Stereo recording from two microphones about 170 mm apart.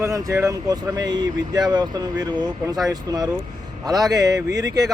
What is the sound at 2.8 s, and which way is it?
Speech, 20° right (ahead or behind).